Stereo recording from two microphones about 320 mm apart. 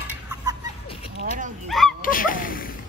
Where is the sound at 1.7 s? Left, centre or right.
Centre.